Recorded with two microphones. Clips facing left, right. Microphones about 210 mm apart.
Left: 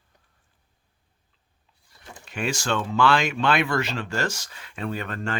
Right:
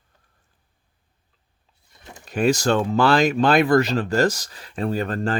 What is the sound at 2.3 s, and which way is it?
Speech, 40° right (ahead or behind).